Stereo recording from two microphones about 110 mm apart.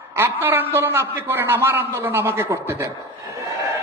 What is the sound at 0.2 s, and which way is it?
A man's voice, 20° right (ahead or behind).